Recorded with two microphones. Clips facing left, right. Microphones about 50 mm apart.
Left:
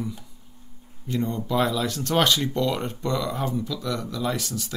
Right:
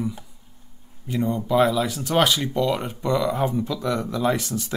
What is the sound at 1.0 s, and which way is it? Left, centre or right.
Speech, centre.